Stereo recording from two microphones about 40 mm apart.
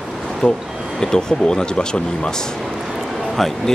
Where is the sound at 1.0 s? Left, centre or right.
Centre.